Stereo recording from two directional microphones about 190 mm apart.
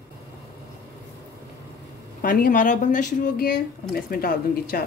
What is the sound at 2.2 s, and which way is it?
Speech, 45° left (ahead or behind).